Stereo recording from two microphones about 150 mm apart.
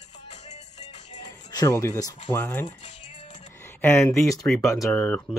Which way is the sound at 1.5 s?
25° left (ahead or behind).